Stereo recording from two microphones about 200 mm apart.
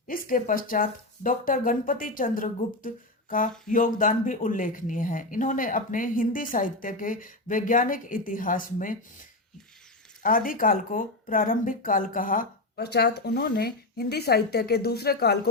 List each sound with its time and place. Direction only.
0.1 s speech: 45° left (ahead or behind)
10.2 s speech: 45° left (ahead or behind)